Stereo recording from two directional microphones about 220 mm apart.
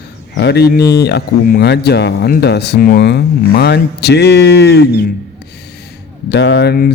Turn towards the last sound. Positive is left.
turn(degrees=45)  # may be behind; listen again after turning